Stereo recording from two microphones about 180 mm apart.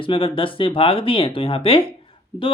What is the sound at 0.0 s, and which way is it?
Speech, 30° left (ahead or behind).